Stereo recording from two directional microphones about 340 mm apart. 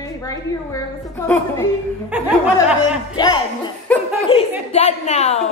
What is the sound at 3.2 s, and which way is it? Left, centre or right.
Speech, centre.